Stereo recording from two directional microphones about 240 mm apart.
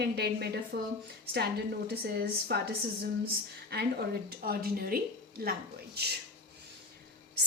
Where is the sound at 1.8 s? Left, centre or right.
Right.